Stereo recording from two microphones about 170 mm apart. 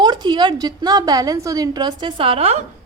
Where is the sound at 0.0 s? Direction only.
25° right (ahead or behind).